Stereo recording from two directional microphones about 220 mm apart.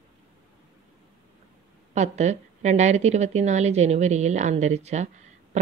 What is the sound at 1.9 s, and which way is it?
A woman's voice, 30° right (ahead or behind).